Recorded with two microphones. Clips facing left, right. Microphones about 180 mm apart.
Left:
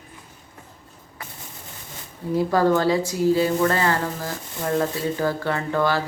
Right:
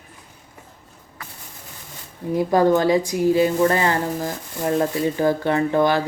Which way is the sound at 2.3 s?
15° right (ahead or behind).